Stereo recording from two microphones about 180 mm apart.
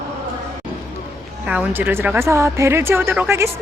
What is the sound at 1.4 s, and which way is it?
A woman's voice, 5° right (ahead or behind).